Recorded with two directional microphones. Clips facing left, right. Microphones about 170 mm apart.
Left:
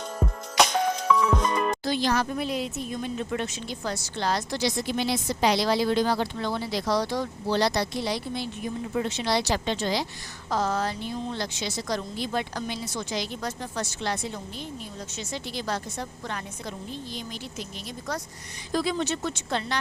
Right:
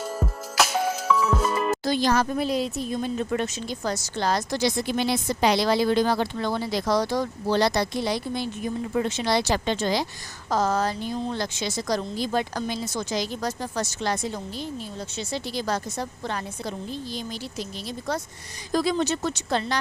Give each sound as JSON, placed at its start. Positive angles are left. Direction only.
{"t": 0.0, "sound": "music", "side_deg": -5}
{"t": 1.8, "sound": "a woman's voice", "side_deg": -40}
{"t": 18.7, "sound": "a woman's voice", "side_deg": -40}